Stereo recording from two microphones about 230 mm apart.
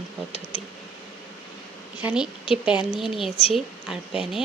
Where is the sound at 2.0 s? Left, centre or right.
Centre.